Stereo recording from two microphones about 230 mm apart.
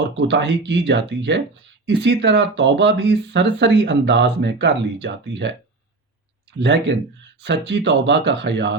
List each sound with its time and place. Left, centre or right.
0.2 s speech: right
6.6 s speech: right